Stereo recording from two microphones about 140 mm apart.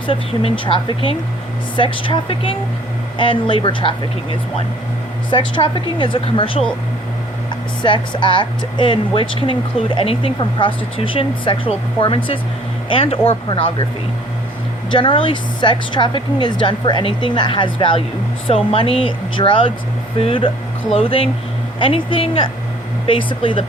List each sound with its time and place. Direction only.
0.1 s speech: 40° left (ahead or behind)
14.8 s speech: 35° left (ahead or behind)